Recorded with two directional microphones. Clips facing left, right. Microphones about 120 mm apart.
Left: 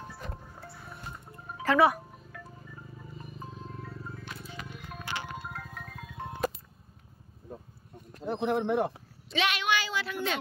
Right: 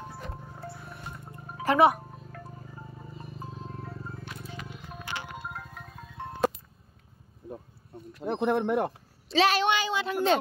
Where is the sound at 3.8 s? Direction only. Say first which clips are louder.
Right 2 dB; 35° right (ahead or behind).